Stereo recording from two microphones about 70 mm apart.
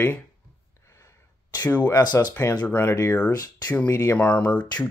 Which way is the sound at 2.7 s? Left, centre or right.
Left.